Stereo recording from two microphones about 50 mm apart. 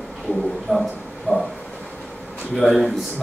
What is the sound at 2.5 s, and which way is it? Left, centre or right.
Speech, centre.